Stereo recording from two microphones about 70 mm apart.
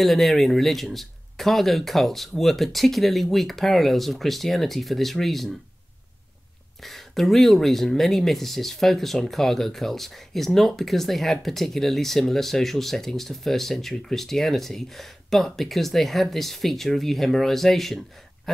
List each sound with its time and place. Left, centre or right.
0.0 s speech: centre
6.8 s speech: centre